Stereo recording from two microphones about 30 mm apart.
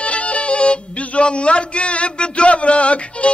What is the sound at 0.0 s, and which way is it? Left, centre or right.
Music, left.